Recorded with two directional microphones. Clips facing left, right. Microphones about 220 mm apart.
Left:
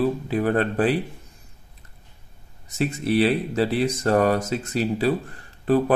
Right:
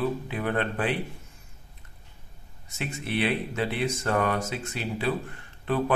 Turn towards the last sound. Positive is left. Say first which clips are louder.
# left 7 dB
turn(degrees=40)  # may be behind; listen again after turning